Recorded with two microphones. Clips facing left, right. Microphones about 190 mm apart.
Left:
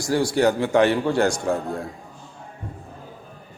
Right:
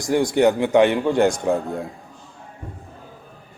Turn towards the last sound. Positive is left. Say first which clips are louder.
# right 2 dB
turn(degrees=-20)  # may be behind; listen again after turning